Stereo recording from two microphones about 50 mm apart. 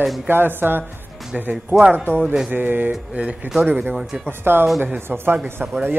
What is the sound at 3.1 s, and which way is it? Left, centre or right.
Speech, right.